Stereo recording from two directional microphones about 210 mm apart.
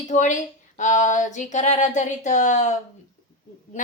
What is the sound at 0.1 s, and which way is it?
A woman's voice, 35° left (ahead or behind).